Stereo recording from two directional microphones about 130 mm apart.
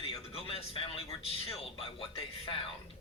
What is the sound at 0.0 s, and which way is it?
Speech, 45° left (ahead or behind).